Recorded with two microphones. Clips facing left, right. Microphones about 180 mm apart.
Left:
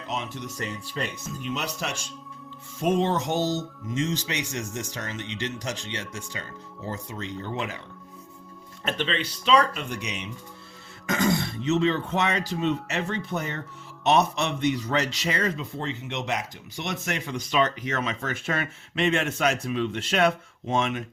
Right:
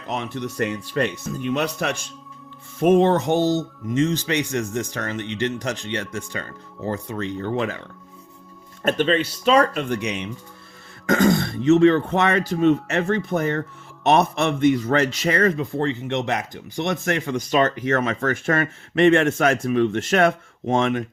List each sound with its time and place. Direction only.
0.1 s speech: 60° right (ahead or behind)
8.8 s speech: 45° right (ahead or behind)